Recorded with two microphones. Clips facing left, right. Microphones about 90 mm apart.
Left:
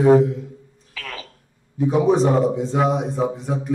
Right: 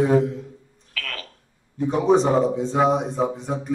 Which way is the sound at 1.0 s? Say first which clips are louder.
Even; 15° left (ahead or behind).